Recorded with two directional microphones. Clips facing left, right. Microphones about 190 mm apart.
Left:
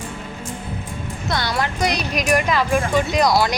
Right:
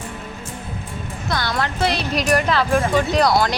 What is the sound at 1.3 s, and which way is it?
A woman's voice, 20° left (ahead or behind).